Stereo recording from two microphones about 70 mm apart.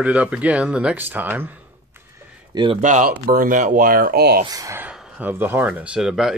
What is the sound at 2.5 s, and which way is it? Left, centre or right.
Speech, right.